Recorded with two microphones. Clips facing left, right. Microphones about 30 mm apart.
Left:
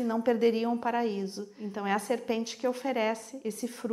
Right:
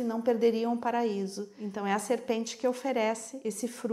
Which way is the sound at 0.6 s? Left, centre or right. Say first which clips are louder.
Even; centre.